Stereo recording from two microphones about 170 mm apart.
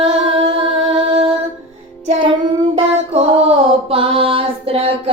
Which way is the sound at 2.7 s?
35° right (ahead or behind).